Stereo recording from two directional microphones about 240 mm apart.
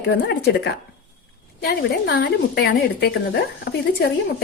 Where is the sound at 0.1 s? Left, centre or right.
Left.